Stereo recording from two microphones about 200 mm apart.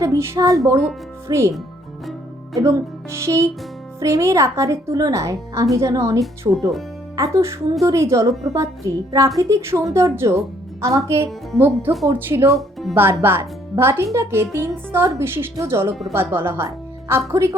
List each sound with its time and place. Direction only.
0.0 s speech: 15° right (ahead or behind)
2.6 s speech: 15° right (ahead or behind)